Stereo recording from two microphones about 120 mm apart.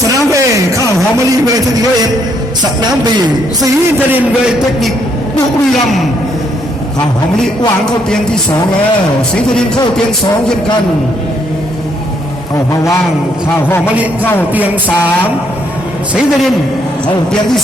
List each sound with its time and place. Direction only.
0.1 s a sound: 25° right (ahead or behind)
1.1 s a man's voice: 30° right (ahead or behind)
12.7 s a man's voice: 25° left (ahead or behind)
13.8 s music: 10° right (ahead or behind)